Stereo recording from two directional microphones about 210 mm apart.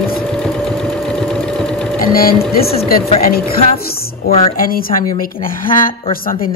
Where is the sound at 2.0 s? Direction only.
45° left (ahead or behind).